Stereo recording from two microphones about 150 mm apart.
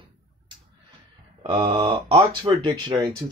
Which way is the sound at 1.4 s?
35° right (ahead or behind).